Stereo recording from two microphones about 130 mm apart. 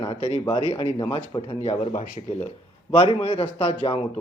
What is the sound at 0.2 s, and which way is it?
A man's voice, 50° left (ahead or behind).